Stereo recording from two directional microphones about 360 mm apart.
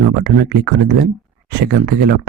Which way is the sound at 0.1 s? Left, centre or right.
Right.